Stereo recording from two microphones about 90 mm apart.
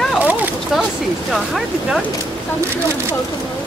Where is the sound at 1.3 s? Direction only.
Centre (ahead or behind).